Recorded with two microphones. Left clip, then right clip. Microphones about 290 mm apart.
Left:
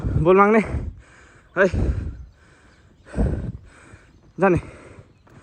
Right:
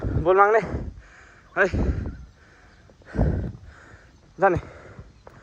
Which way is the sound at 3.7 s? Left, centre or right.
Centre.